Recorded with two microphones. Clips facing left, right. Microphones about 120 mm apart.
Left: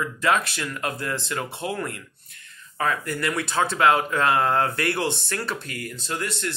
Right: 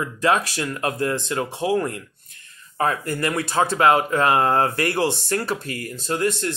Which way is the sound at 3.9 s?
45° right (ahead or behind).